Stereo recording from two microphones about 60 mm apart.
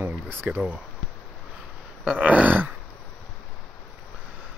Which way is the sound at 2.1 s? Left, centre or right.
Right.